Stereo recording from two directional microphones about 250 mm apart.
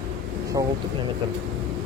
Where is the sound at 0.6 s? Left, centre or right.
Centre.